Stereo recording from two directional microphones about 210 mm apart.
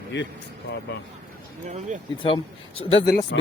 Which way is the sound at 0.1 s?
55° left (ahead or behind).